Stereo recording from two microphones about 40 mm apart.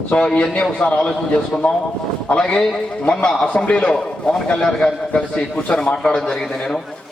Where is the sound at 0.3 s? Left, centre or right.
Left.